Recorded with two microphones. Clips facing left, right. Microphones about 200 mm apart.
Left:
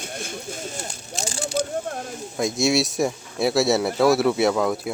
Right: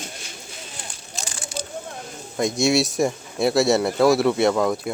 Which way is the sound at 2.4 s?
Centre (ahead or behind).